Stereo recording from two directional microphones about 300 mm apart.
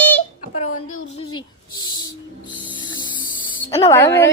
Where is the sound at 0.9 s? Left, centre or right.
Centre.